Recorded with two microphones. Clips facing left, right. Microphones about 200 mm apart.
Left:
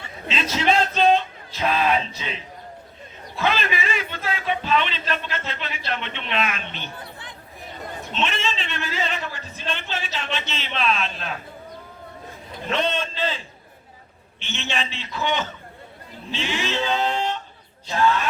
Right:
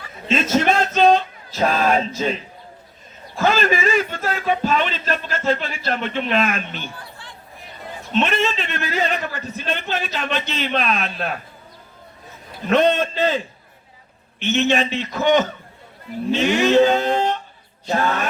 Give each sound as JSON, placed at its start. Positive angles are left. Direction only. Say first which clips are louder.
{"t": 0.3, "sound": "a man's voice", "louder": "right 5 dB", "side_deg": -45}
{"t": 8.1, "sound": "a man's voice", "louder": "right 7 dB", "side_deg": -55}
{"t": 12.6, "sound": "a man's voice", "louder": "right 8 dB", "side_deg": -50}
{"t": 14.6, "sound": "a man's voice", "louder": "right 9 dB", "side_deg": -45}